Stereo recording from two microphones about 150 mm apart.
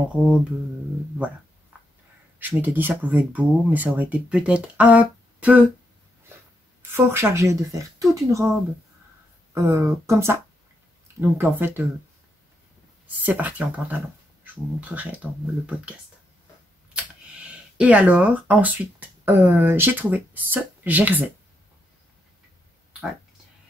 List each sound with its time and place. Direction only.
0.1 s speech: 10° right (ahead or behind)
1.7 s a sound: 10° right (ahead or behind)
2.3 s speech: 10° right (ahead or behind)
6.9 s speech: 15° right (ahead or behind)
13.0 s speech: 10° right (ahead or behind)
16.9 s speech: 5° right (ahead or behind)